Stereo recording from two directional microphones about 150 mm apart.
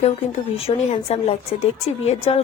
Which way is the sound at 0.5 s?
40° left (ahead or behind).